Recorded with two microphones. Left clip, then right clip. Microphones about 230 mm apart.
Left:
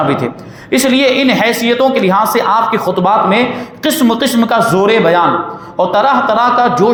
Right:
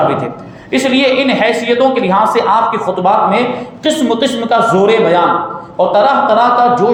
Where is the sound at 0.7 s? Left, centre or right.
Left.